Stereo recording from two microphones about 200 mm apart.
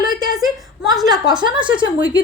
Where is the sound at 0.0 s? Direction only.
20° right (ahead or behind).